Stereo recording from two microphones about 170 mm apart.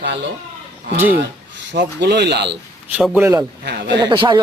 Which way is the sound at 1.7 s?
85° right.